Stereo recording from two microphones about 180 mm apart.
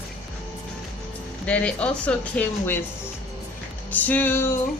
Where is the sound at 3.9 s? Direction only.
10° left (ahead or behind).